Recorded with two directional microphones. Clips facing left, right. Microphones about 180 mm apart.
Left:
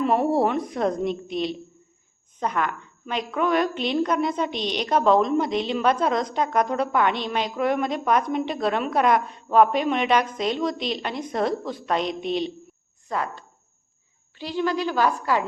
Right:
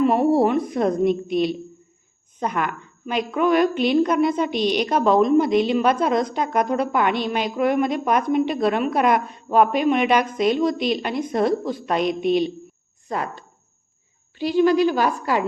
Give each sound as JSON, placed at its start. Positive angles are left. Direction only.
{"t": 0.0, "sound": "a woman's voice", "side_deg": -5}